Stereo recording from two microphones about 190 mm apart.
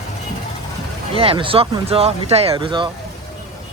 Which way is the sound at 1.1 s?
30° right (ahead or behind).